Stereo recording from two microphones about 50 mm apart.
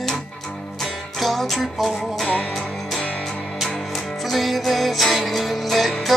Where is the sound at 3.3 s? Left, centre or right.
Centre.